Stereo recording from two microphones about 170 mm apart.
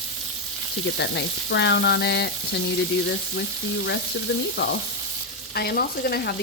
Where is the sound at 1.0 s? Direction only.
90° left.